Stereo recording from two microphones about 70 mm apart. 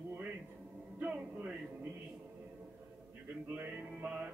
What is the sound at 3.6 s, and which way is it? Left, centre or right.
Music, right.